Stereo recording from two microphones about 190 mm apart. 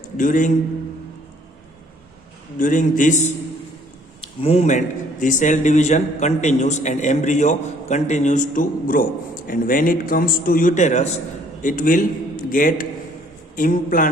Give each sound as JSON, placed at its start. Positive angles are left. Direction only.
{"t": 0.2, "sound": "a man's voice", "side_deg": 45}
{"t": 2.6, "sound": "a man's voice", "side_deg": 45}
{"t": 4.2, "sound": "a man's voice", "side_deg": 30}